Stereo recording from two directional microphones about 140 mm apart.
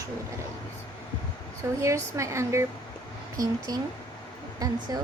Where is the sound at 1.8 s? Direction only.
20° right (ahead or behind).